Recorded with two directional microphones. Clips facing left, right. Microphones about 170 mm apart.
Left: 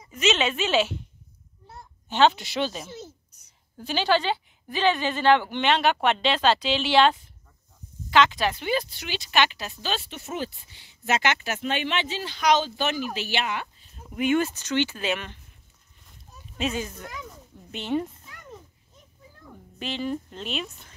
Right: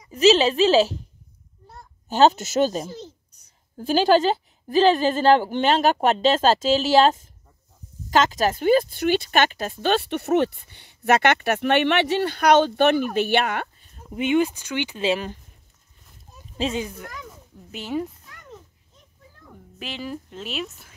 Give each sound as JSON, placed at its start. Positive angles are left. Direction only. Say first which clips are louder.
{"t": 0.1, "sound": "a woman's voice", "louder": "right 8 dB", "side_deg": -35}
{"t": 2.0, "sound": "a woman's voice", "louder": "right 3 dB", "side_deg": -40}
{"t": 14.1, "sound": "speech", "louder": "right 3 dB", "side_deg": -20}
{"t": 15.0, "sound": "a woman's voice", "louder": "right 6 dB", "side_deg": -30}
{"t": 16.5, "sound": "speech", "louder": "right 3 dB", "side_deg": -30}
{"t": 16.8, "sound": "speech", "louder": "right 3 dB", "side_deg": -5}
{"t": 17.1, "sound": "a sound", "louder": "even", "side_deg": 0}
{"t": 19.4, "sound": "speech", "louder": "left 2 dB", "side_deg": 0}